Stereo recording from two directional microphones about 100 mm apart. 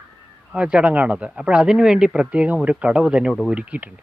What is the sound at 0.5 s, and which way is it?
Speech, 10° right (ahead or behind).